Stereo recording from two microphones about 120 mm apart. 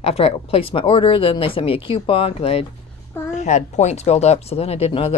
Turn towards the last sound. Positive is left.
turn(degrees=50)  # may be behind; listen again after turning